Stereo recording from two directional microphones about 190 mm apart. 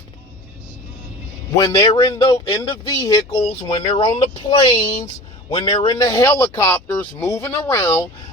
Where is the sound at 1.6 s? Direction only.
20° left (ahead or behind).